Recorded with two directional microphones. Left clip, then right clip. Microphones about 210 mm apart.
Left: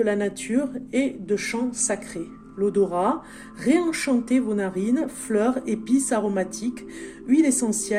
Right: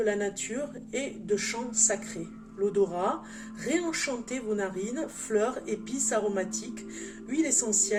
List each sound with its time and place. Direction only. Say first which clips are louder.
0.0 s speech: left 5 dB; 45° left (ahead or behind)